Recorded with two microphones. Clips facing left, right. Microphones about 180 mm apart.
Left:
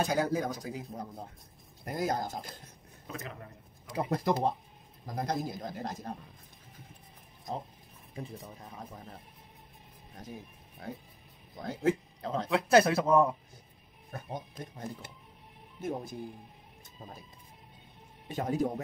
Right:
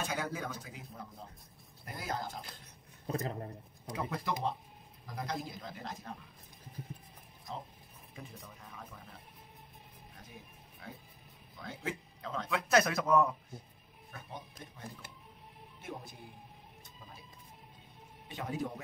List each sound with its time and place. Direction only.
0.0 s speech: 35° left (ahead or behind)
3.1 s a man's voice: 35° right (ahead or behind)
3.9 s speech: 40° left (ahead or behind)
8.1 s speech: 35° left (ahead or behind)
10.8 s speech: 40° left (ahead or behind)
14.1 s speech: 45° left (ahead or behind)
18.3 s speech: 40° left (ahead or behind)